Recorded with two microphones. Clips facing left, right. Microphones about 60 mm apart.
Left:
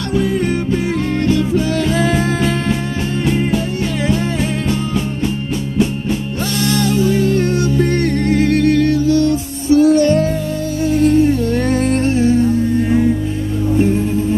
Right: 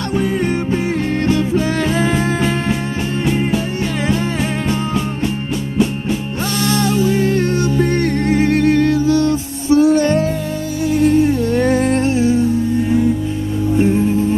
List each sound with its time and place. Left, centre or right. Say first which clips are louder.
1.2 s music: left 1 dB; right
6.6 s music: even; right
7.7 s music: even; right
13.7 s music: right 1 dB; right